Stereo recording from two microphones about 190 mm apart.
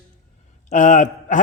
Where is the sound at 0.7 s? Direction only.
40° left (ahead or behind).